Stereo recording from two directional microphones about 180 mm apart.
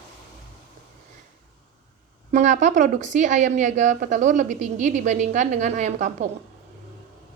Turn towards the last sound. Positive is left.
turn(degrees=-40)  # may be behind; listen again after turning